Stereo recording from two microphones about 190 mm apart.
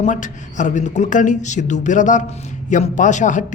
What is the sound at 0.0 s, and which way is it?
Speech, 40° left (ahead or behind).